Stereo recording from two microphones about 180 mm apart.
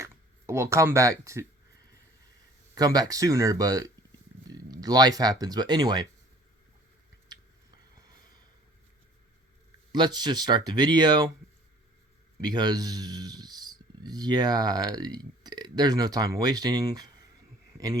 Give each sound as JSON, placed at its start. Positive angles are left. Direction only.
{"t": 0.0, "sound": "speech", "side_deg": -15}
{"t": 2.7, "sound": "speech", "side_deg": -20}
{"t": 9.9, "sound": "speech", "side_deg": -25}
{"t": 12.4, "sound": "speech", "side_deg": -20}